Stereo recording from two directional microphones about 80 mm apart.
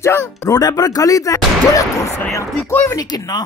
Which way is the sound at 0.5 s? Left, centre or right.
Left.